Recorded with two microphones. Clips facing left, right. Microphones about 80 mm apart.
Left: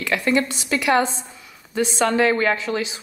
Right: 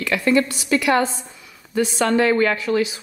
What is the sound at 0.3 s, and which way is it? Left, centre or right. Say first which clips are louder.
Speech: right 4 dB; left.